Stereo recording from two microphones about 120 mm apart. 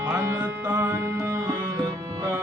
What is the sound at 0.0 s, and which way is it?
Music, 20° right (ahead or behind).